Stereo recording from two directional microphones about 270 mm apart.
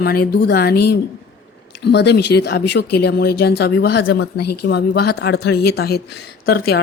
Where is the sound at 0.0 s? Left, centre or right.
Left.